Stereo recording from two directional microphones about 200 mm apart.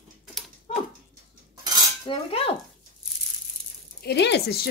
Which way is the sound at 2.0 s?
30° left (ahead or behind).